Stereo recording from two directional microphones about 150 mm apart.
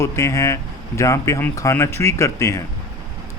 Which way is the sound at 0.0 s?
20° left (ahead or behind).